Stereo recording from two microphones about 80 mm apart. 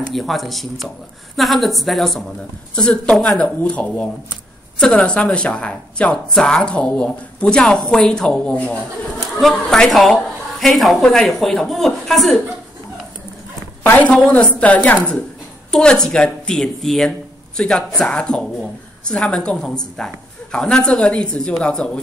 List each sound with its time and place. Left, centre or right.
0.1 s a woman's voice: centre
2.7 s a woman's voice: centre
14.0 s a woman's voice: centre